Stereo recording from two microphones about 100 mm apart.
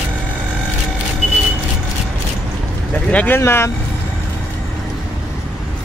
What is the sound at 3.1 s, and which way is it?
Speech, 20° left (ahead or behind).